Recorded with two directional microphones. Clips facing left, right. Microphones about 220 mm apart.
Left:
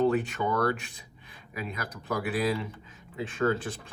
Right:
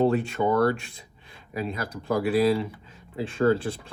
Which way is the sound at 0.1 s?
30° right (ahead or behind).